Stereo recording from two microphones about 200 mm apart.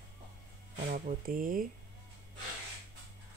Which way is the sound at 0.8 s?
45° right (ahead or behind).